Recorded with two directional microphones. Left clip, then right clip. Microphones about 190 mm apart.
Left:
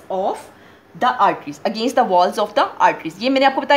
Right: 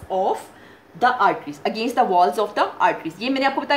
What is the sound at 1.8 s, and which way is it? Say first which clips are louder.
A woman's voice: left 2 dB; 45° left (ahead or behind).